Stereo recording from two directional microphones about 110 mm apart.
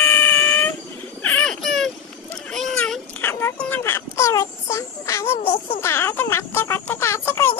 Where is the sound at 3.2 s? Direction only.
25° left (ahead or behind).